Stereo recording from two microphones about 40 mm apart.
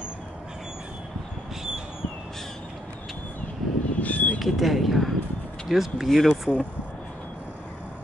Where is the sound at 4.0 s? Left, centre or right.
Left.